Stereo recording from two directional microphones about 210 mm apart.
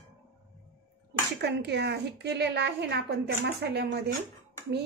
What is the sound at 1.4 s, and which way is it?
A woman's voice, 55° right (ahead or behind).